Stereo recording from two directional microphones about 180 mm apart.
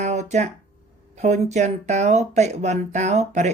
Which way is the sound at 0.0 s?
40° right (ahead or behind).